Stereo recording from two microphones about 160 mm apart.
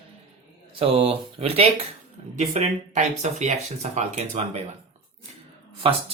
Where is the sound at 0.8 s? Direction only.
35° right (ahead or behind).